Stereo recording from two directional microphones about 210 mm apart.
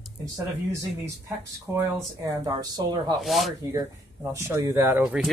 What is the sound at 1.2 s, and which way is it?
Speech, 15° right (ahead or behind).